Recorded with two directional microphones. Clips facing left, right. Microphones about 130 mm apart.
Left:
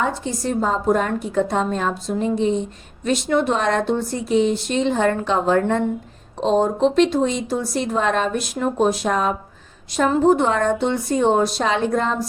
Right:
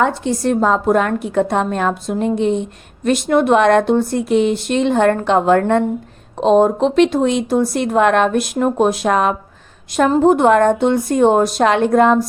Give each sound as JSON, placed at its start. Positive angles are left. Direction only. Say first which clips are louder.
{"t": 0.0, "sound": "a woman's voice", "louder": "right 6 dB", "side_deg": -70}
{"t": 10.2, "sound": "a woman's voice", "louder": "right 6 dB", "side_deg": -55}